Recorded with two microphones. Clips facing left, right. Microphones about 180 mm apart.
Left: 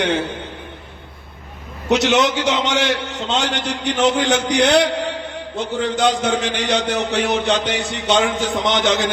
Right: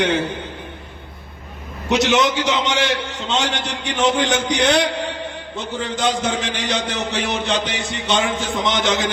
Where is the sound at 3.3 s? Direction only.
60° left (ahead or behind).